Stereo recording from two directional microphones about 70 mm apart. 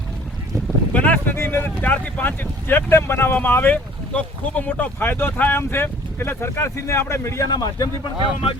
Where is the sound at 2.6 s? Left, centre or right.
Left.